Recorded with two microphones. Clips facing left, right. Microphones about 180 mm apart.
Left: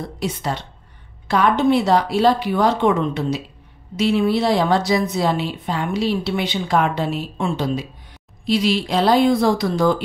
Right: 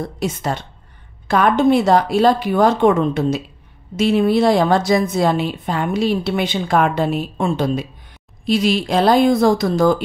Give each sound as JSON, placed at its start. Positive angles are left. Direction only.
{"t": 0.2, "sound": "a woman's voice", "side_deg": -45}